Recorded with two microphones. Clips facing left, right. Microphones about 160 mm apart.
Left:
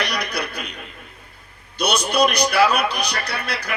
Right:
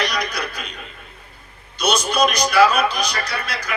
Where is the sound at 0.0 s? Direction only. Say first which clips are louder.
Right 1 dB; 60° left (ahead or behind).